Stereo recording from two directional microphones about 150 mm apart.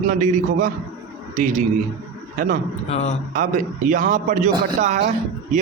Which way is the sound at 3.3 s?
60° right (ahead or behind).